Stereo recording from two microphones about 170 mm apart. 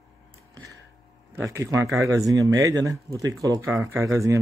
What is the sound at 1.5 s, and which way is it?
Speech, 15° right (ahead or behind).